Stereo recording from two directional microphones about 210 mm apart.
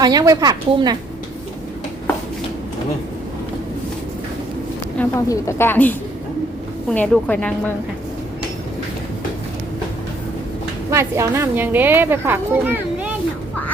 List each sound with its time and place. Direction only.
0.0 s a woman's voice: 15° right (ahead or behind)
4.9 s a woman's voice: 15° left (ahead or behind)
10.9 s a woman's voice: 10° right (ahead or behind)